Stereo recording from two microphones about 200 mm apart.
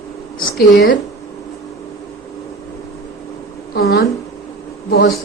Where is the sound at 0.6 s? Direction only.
55° left (ahead or behind).